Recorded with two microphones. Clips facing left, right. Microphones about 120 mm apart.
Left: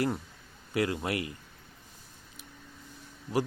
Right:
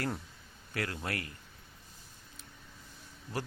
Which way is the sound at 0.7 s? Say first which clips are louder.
Left 7 dB; 15° left (ahead or behind).